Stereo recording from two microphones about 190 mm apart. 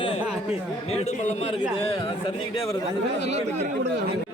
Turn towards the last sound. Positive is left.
turn(degrees=-35)  # may be behind; listen again after turning